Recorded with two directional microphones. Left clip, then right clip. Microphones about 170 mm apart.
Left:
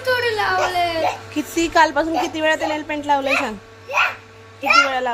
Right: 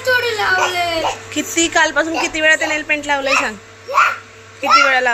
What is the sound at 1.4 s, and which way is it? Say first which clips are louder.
A woman's voice: right 1 dB; 20° left (ahead or behind).